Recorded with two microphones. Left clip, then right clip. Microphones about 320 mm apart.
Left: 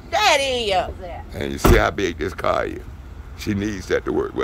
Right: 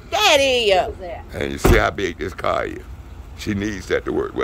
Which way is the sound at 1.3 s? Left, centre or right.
Centre.